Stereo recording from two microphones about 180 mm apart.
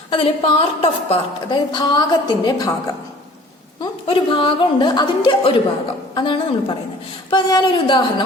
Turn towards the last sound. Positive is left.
turn(degrees=25)  # may be behind; listen again after turning